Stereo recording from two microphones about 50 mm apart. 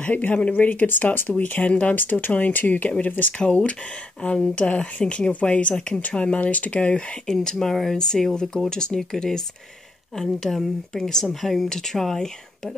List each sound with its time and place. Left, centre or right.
0.0 s a woman's voice: left
7.2 s speech: centre